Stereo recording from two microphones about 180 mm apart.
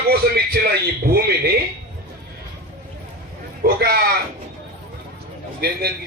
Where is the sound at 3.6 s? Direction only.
60° right (ahead or behind).